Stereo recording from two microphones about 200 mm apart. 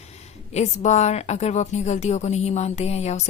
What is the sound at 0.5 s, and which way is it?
A woman's voice, 35° left (ahead or behind).